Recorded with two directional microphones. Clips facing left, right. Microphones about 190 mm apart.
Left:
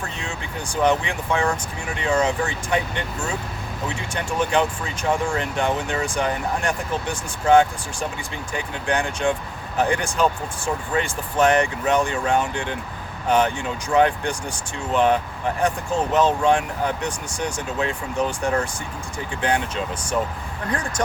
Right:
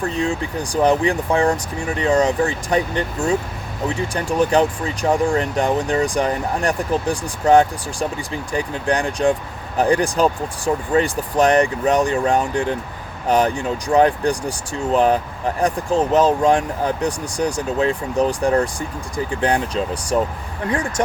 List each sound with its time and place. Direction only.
0.2 s speech: 35° right (ahead or behind)